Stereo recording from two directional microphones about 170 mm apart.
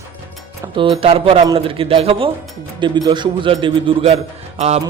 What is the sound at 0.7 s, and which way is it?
A man's voice, 30° right (ahead or behind).